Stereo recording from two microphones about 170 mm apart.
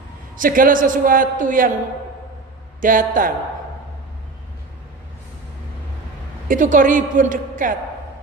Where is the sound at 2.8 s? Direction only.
50° right (ahead or behind).